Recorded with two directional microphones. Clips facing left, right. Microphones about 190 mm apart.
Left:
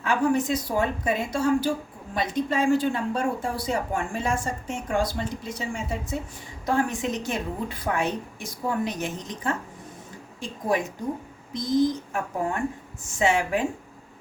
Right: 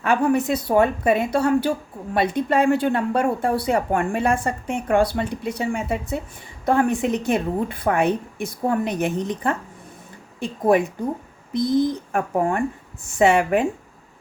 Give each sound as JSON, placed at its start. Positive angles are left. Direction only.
{"t": 0.0, "sound": "speech", "side_deg": -60}
{"t": 12.1, "sound": "speech", "side_deg": -55}